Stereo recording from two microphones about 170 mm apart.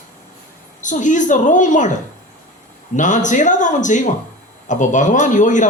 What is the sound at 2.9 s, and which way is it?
A man's voice, 45° left (ahead or behind).